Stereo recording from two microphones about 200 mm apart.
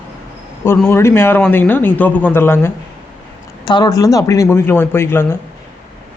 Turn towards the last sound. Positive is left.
turn(degrees=10)  # may be behind; listen again after turning